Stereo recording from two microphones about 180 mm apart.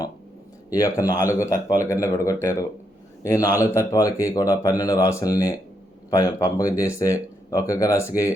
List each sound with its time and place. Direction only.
0.7 s speech: 20° left (ahead or behind)